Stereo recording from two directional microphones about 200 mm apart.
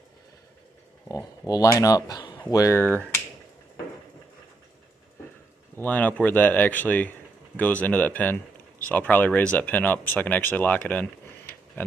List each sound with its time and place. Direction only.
1.0 s speech: 15° left (ahead or behind)
5.7 s speech: 10° left (ahead or behind)